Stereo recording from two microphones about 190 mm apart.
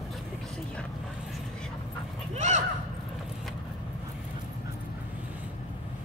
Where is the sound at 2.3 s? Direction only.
40° right (ahead or behind).